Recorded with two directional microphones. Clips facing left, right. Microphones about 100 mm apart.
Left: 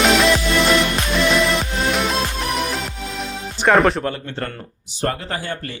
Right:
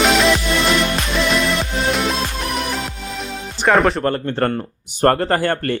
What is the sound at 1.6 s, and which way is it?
Music, centre (ahead or behind).